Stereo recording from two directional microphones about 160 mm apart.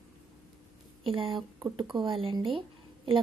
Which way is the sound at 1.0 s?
35° right (ahead or behind).